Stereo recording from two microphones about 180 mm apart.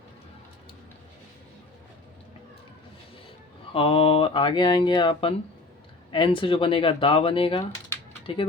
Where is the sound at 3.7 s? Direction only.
30° left (ahead or behind).